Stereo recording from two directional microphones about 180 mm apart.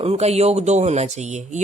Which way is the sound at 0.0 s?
35° right (ahead or behind).